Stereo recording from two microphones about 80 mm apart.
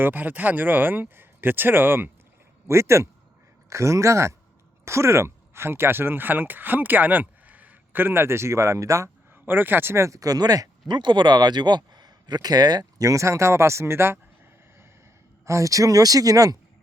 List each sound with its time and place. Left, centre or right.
0.0 s speech: right
9.3 s speech: right
10.8 s speech: right
13.1 s speech: right
15.4 s speech: right